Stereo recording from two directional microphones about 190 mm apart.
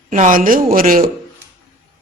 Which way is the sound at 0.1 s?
45° right (ahead or behind).